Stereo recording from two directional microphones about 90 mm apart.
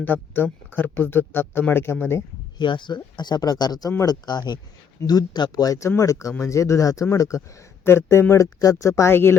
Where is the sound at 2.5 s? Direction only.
60° left (ahead or behind).